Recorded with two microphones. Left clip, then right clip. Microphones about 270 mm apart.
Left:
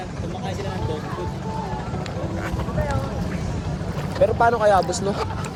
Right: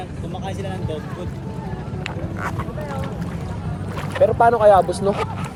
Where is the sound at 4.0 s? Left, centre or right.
Right.